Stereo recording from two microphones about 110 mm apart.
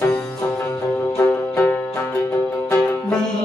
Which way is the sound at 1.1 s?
20° left (ahead or behind).